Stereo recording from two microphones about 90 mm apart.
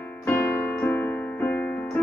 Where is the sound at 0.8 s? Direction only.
20° left (ahead or behind).